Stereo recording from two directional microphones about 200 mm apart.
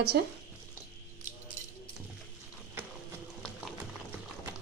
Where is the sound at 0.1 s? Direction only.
50° right (ahead or behind).